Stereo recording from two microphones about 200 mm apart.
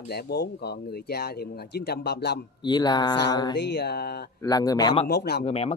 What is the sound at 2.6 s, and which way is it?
Speech, 20° left (ahead or behind).